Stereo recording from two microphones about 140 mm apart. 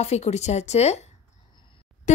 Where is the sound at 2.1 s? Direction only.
60° left (ahead or behind).